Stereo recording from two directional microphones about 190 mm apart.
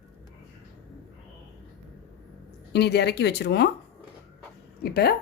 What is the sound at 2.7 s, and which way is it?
Speech, 60° left (ahead or behind).